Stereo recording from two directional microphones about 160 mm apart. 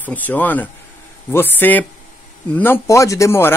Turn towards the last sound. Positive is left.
turn(degrees=15)  # may be behind; listen again after turning